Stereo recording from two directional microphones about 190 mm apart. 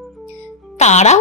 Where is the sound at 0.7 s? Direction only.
35° left (ahead or behind).